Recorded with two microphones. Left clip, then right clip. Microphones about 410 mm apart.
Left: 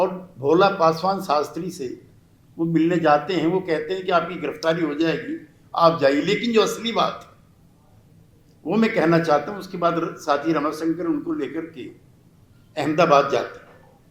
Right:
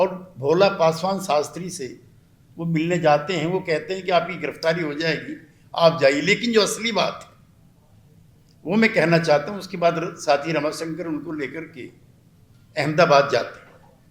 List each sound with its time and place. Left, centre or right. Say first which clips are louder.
0.0 s a man's voice: even; right
8.6 s a man's voice: right 1 dB; right